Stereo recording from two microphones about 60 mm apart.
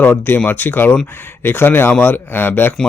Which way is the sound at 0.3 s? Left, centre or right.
Left.